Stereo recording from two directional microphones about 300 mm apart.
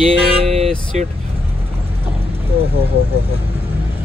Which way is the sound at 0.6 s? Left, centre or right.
Centre.